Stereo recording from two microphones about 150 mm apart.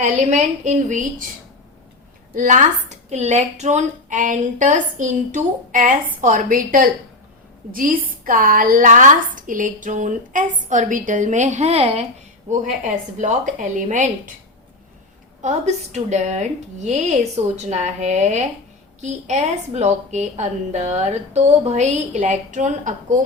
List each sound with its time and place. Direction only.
0.0 s a woman's voice: 50° right (ahead or behind)
2.3 s a woman's voice: 60° right (ahead or behind)
3.1 s a woman's voice: 50° right (ahead or behind)
12.5 s a woman's voice: 55° right (ahead or behind)
15.4 s a woman's voice: 50° right (ahead or behind)